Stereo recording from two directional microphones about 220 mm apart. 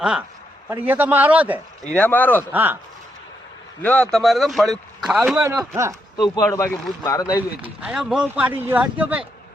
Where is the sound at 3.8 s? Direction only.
5° left (ahead or behind).